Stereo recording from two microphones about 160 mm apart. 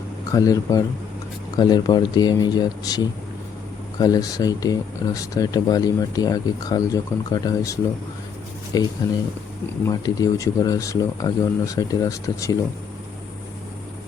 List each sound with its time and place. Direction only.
0.3 s speech: 20° left (ahead or behind)